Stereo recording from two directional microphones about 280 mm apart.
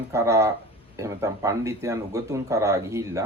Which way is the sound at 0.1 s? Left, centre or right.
Centre.